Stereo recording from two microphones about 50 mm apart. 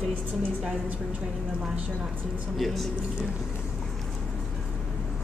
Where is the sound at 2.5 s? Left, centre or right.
Centre.